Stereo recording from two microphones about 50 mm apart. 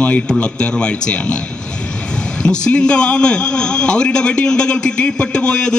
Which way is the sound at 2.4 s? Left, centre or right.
Centre.